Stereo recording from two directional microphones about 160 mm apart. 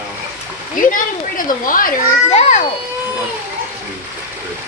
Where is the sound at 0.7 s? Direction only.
55° left (ahead or behind).